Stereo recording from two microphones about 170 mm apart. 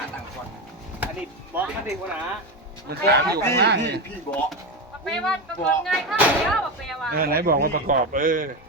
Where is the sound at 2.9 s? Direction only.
70° right (ahead or behind).